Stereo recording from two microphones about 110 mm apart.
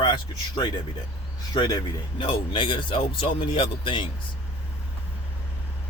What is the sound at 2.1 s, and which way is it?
A man's voice, 50° left (ahead or behind).